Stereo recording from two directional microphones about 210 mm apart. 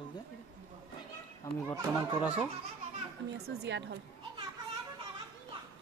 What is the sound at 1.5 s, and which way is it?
Speech, 10° left (ahead or behind).